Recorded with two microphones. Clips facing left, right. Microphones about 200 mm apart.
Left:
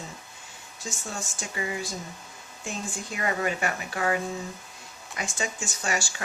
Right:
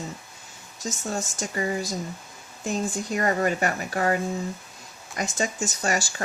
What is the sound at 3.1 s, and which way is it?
Speech, 40° right (ahead or behind).